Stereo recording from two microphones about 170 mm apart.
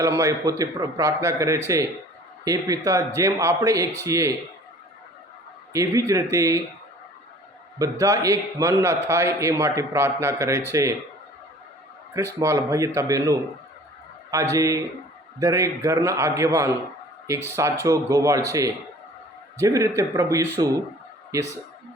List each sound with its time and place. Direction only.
0.0 s a man's voice: 15° right (ahead or behind)
5.7 s speech: 20° right (ahead or behind)
7.8 s a man's voice: 20° right (ahead or behind)
12.1 s a man's voice: 15° right (ahead or behind)